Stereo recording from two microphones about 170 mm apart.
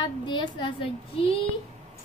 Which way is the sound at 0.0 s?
25° left (ahead or behind).